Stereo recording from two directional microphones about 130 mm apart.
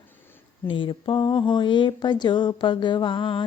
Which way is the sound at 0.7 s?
40° left (ahead or behind).